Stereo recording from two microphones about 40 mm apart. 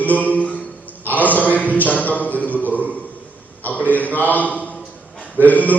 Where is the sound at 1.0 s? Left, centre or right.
Left.